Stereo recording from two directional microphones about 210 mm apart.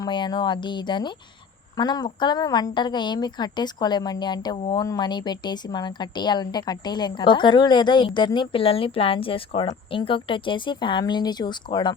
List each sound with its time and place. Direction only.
0.0 s a woman's voice: 20° left (ahead or behind)